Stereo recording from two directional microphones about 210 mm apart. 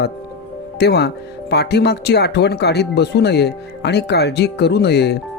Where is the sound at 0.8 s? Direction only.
50° left (ahead or behind).